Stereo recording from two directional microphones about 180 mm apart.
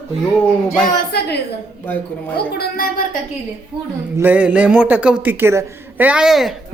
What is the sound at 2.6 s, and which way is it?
Speech, 55° left (ahead or behind).